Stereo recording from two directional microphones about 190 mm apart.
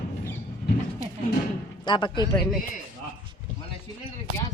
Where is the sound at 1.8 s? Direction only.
25° left (ahead or behind).